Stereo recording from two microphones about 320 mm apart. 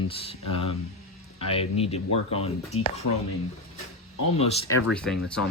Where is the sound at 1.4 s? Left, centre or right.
Centre.